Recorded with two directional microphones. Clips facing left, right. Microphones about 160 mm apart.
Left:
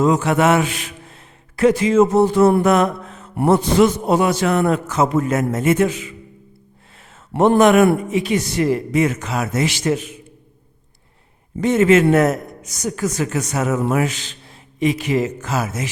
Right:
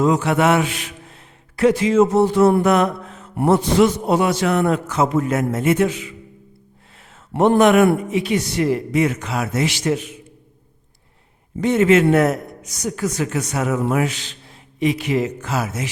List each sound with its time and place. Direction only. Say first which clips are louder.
0.0 s a man's voice: left 1 dB; 45° left (ahead or behind)
7.5 s a man's voice: left 1 dB; 40° left (ahead or behind)
11.6 s a man's voice: left 1 dB; 40° left (ahead or behind)